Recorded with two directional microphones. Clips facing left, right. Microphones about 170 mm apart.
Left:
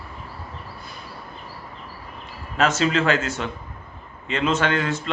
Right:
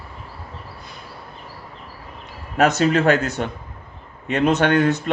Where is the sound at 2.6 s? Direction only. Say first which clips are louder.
Right 4 dB; 60° right (ahead or behind).